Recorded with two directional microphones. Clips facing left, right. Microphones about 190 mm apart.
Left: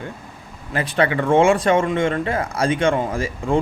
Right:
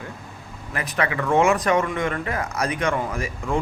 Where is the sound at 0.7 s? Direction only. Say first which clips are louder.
Left 6 dB; 30° left (ahead or behind).